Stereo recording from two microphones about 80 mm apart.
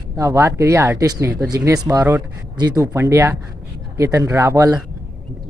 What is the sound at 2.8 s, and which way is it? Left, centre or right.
Speech, right.